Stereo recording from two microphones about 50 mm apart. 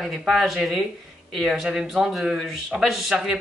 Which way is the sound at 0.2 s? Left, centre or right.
Centre.